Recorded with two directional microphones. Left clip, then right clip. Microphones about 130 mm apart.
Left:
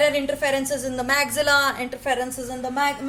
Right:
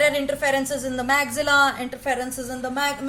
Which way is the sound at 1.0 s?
30° left (ahead or behind).